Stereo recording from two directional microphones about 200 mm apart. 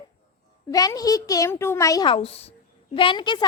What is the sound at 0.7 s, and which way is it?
A woman's voice, 20° left (ahead or behind).